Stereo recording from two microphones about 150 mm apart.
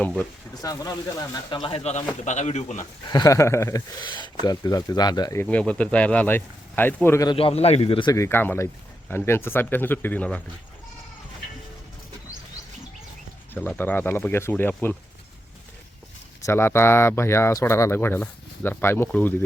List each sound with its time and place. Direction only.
0.0 s speech: 10° left (ahead or behind)
0.6 s speech: 25° left (ahead or behind); by 2.8 s 50° left (ahead or behind)
3.1 s speech: 25° left (ahead or behind)
5.4 s speech: 10° left (ahead or behind)
7.3 s a man's voice: 40° left (ahead or behind)
8.1 s speech: 15° left (ahead or behind)
13.5 s speech: 10° left (ahead or behind)
16.5 s speech: 15° left (ahead or behind)